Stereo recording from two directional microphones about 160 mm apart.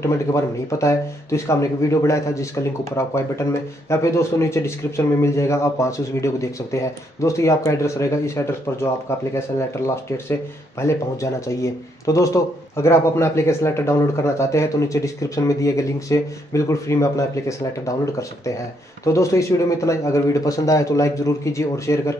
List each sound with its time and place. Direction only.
0.0 s a man's voice: 20° left (ahead or behind)
10.8 s speech: 20° left (ahead or behind)
19.1 s speech: 20° left (ahead or behind)